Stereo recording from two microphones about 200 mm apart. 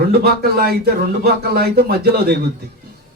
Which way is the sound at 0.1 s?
50° right (ahead or behind).